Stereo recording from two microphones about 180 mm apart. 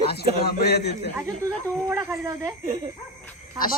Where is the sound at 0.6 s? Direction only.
65° left (ahead or behind).